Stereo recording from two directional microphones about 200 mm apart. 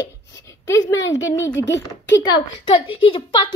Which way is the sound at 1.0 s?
70° left (ahead or behind).